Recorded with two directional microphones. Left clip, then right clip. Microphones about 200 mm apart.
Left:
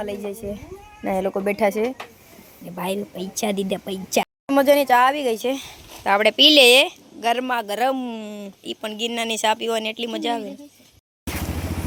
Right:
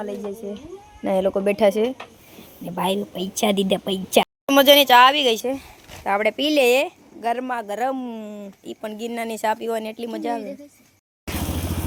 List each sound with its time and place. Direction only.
0.4 s speech: 15° left (ahead or behind)
1.0 s speech: 5° right (ahead or behind)